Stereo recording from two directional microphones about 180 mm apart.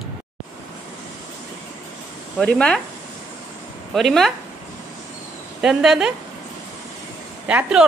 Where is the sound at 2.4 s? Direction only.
5° left (ahead or behind).